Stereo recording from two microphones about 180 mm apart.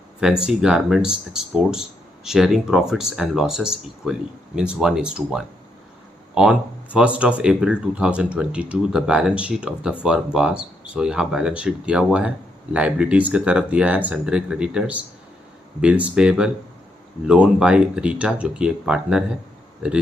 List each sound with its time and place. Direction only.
0.4 s speech: 5° right (ahead or behind)